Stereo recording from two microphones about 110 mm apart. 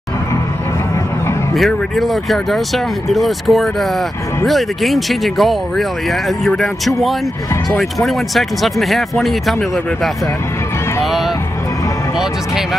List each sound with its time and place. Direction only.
1.5 s speech: centre (ahead or behind)
7.7 s speech: centre (ahead or behind)